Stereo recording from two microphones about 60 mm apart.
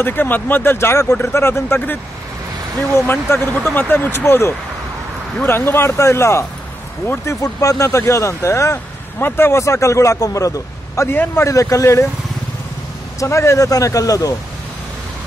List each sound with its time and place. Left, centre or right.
0.0 s speech: left
3.1 s speech: left
7.2 s a man's voice: left
11.1 s speech: left
11.4 s a man's voice: left
13.2 s a man's voice: left